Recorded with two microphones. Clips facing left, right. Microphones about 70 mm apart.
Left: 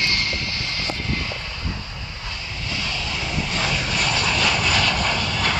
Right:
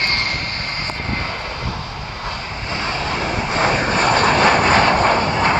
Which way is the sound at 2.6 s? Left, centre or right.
Right.